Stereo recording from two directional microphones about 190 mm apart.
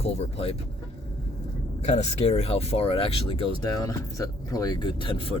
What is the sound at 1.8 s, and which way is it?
Speech, 35° left (ahead or behind).